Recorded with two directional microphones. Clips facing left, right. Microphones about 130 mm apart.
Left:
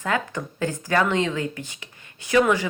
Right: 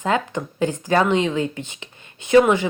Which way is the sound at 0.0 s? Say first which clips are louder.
Right 4 dB; 20° right (ahead or behind).